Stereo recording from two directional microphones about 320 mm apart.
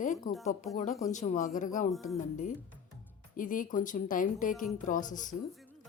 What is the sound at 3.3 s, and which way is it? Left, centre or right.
A woman's voice, left.